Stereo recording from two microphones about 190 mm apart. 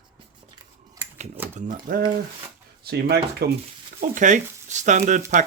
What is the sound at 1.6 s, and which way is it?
Speech, 45° right (ahead or behind).